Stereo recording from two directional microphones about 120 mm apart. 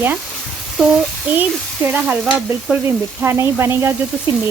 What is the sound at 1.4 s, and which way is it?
A woman's voice, 15° right (ahead or behind).